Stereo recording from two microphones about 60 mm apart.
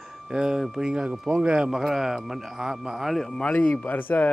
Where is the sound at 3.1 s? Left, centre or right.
Centre.